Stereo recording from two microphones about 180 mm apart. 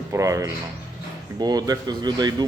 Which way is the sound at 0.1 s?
15° right (ahead or behind).